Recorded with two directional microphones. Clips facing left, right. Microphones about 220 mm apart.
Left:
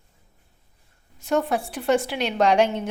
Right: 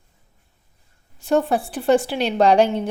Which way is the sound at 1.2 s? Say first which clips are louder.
Right 4 dB; 30° right (ahead or behind).